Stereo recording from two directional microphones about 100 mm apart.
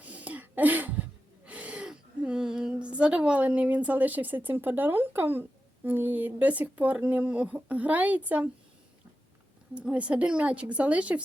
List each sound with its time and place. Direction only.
0.0 s a sound: 15° right (ahead or behind)
1.5 s speech: 15° right (ahead or behind)
9.7 s a woman's voice: 15° right (ahead or behind)